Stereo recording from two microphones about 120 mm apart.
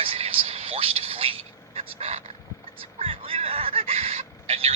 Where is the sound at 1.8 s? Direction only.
65° right (ahead or behind).